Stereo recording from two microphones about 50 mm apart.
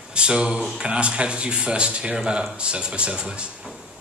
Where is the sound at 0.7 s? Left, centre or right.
Right.